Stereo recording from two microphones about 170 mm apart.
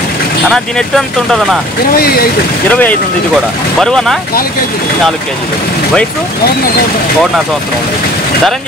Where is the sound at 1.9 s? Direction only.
65° left (ahead or behind).